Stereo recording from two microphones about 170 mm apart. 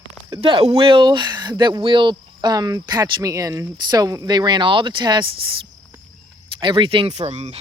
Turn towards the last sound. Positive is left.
turn(degrees=-40)  # may be behind; listen again after turning